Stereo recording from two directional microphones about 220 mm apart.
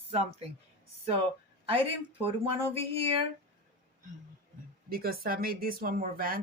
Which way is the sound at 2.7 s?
25° right (ahead or behind).